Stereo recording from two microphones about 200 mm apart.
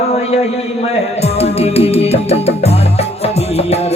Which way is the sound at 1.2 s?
30° left (ahead or behind).